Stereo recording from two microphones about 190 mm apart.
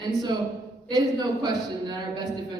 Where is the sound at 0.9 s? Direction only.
20° right (ahead or behind).